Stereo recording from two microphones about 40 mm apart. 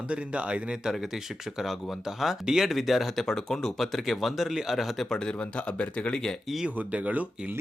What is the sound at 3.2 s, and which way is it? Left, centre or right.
Speech, centre.